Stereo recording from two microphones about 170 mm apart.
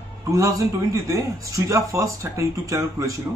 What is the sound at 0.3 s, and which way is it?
A man's voice, 20° right (ahead or behind).